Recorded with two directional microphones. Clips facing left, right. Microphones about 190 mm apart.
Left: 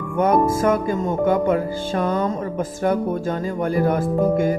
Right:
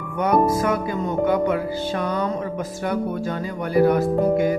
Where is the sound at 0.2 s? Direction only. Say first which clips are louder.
Left 1 dB; 45° left (ahead or behind).